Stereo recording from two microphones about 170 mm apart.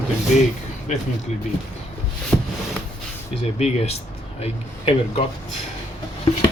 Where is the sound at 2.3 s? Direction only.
5° left (ahead or behind).